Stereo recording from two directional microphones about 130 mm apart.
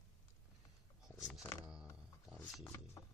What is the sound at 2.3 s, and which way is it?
Music, 10° left (ahead or behind).